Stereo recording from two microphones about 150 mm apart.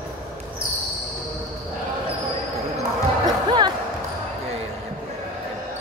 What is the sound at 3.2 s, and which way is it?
Basketball bounce, 30° right (ahead or behind).